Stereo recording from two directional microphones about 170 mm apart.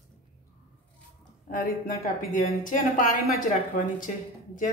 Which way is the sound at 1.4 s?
60° left (ahead or behind).